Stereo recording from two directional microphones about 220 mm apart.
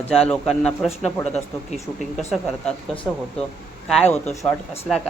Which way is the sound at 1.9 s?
Centre (ahead or behind).